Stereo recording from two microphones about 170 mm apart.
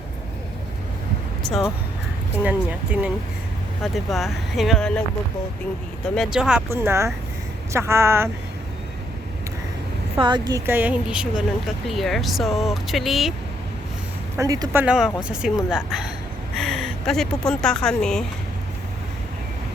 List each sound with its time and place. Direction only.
1.5 s speech: centre (ahead or behind)
6.1 s speech: 5° right (ahead or behind)
6.7 s speech: 15° right (ahead or behind)
10.2 s speech: 25° right (ahead or behind); by 13.3 s centre (ahead or behind)
14.3 s speech: 20° right (ahead or behind); by 18.3 s 5° left (ahead or behind)